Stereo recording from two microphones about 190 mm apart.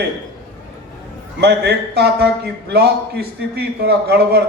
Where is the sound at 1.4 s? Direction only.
60° right (ahead or behind).